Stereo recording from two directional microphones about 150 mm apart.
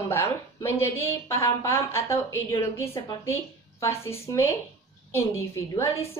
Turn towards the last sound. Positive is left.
turn(degrees=20)  # may be behind; listen again after turning